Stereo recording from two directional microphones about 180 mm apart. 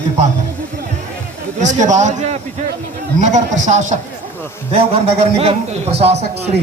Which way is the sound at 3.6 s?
40° right (ahead or behind).